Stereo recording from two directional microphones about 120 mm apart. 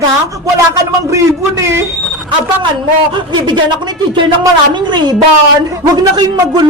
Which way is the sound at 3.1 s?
40° right (ahead or behind).